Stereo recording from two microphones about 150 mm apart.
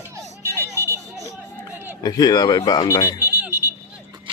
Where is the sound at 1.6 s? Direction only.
15° right (ahead or behind).